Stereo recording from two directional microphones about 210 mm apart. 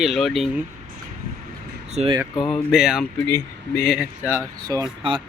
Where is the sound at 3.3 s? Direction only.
10° left (ahead or behind); by 5.2 s 20° right (ahead or behind).